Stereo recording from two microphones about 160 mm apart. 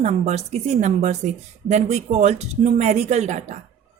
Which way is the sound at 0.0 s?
45° right (ahead or behind).